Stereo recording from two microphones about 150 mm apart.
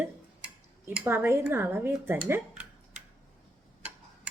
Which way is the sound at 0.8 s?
15° right (ahead or behind).